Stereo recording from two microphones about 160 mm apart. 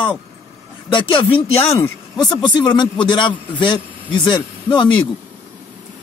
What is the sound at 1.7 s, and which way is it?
A man's voice, 20° left (ahead or behind).